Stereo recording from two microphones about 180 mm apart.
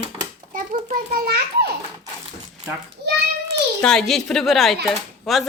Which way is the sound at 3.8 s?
5° left (ahead or behind).